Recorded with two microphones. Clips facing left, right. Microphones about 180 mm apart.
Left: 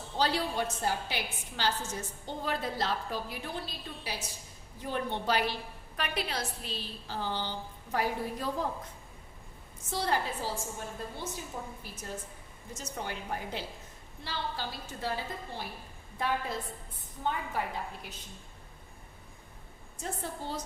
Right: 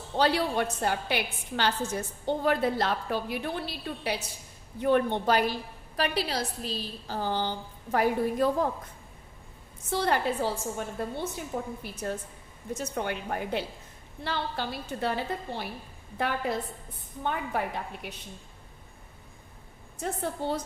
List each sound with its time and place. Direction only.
0.2 s a woman's voice: 60° right (ahead or behind)
6.0 s a woman's voice: 35° right (ahead or behind); by 8.6 s 55° right (ahead or behind)
9.9 s a woman's voice: 60° right (ahead or behind)
20.0 s a woman's voice: 65° right (ahead or behind)